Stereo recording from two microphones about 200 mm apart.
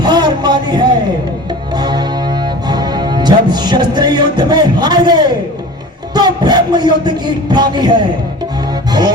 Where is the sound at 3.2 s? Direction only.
20° right (ahead or behind).